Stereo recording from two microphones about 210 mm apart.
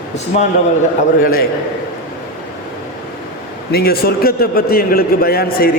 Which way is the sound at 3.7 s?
45° left (ahead or behind).